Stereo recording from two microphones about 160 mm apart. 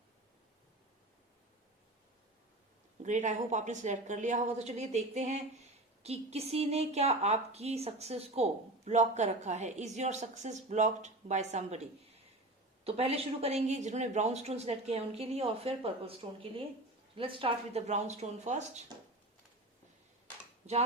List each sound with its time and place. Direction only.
3.0 s a woman's voice: 50° right (ahead or behind)